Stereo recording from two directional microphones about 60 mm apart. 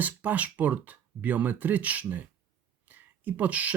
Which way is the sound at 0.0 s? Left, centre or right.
Right.